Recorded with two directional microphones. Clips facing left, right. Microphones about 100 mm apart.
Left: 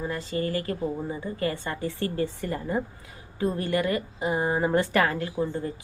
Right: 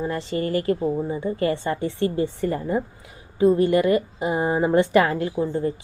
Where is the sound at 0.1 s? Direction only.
25° right (ahead or behind).